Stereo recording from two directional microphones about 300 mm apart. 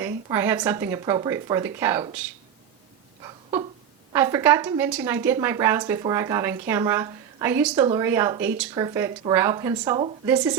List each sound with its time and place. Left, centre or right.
0.0 s speech: centre
3.2 s a sound: centre
4.1 s speech: centre